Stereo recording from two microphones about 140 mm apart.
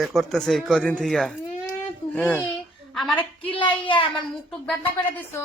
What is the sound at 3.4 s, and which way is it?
Speech, 35° left (ahead or behind).